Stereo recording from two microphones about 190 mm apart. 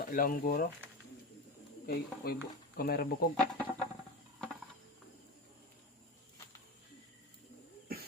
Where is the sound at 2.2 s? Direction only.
50° left (ahead or behind).